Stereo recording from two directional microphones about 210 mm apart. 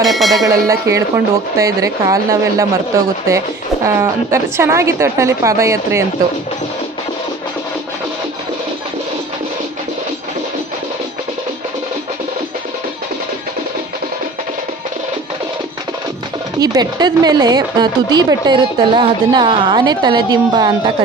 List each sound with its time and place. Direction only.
0.0 s bell: centre (ahead or behind)
0.4 s speech: 15° right (ahead or behind)
16.6 s a woman's voice: 20° right (ahead or behind)